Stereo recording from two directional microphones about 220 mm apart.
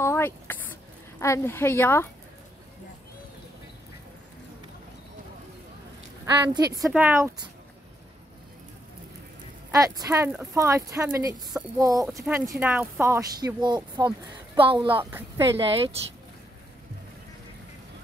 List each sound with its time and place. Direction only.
0.0 s a sound: 10° left (ahead or behind)
1.2 s speech: 10° left (ahead or behind)
6.2 s speech: 15° right (ahead or behind)
9.7 s speech: 15° right (ahead or behind)
15.0 s speech: 10° right (ahead or behind)
15.5 s speech: 25° right (ahead or behind)